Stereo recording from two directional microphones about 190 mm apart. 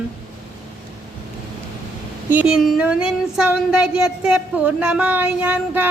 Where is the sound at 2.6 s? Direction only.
Centre (ahead or behind).